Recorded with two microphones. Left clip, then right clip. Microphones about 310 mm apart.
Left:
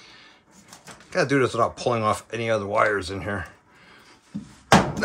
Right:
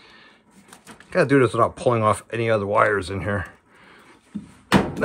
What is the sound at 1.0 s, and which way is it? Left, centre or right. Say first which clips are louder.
Speech: right 4 dB; right.